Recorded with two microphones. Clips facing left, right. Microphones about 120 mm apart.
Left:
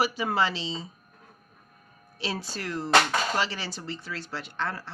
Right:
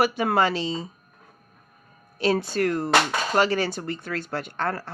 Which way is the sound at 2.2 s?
55° right (ahead or behind).